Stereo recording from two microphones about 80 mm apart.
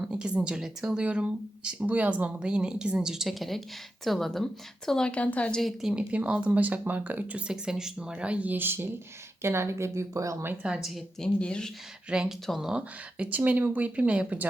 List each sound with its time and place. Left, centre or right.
0.0 s speech: centre
5.8 s a woman's voice: centre; by 10.3 s right
10.6 s speech: centre
11.2 s speech: centre
12.0 s speech: centre
12.7 s speech: centre